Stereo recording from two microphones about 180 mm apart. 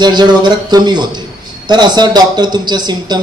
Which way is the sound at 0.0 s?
25° right (ahead or behind).